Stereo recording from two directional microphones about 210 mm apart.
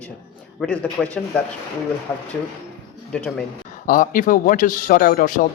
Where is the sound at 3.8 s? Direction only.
40° left (ahead or behind).